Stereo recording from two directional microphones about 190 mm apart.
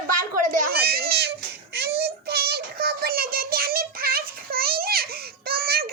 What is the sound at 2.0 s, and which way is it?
Child singing, 55° right (ahead or behind).